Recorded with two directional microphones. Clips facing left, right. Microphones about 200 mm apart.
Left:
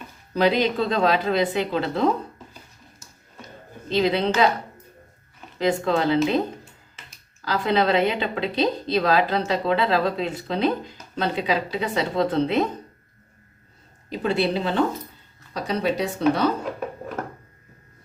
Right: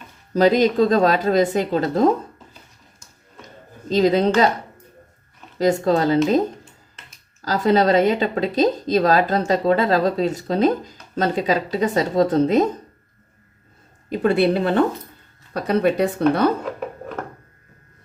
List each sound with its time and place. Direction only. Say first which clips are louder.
0.3 s speech: right 5 dB; 40° right (ahead or behind)
3.8 s speech: right 5 dB; 40° right (ahead or behind)
5.5 s speech: right 4 dB; 40° right (ahead or behind)
7.4 s speech: right 4 dB; 40° right (ahead or behind)
14.1 s a woman's voice: right 5 dB; 55° right (ahead or behind)